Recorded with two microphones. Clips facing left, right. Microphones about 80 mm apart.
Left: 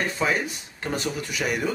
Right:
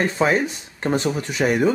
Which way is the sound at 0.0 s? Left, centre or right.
Right.